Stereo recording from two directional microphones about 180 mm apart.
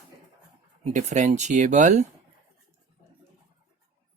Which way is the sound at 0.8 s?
40° right (ahead or behind).